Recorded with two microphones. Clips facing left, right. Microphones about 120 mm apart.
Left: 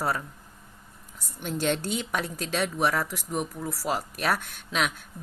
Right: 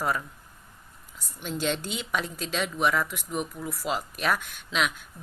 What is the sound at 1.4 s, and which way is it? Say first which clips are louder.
A woman's voice: left 2 dB; 50° left (ahead or behind).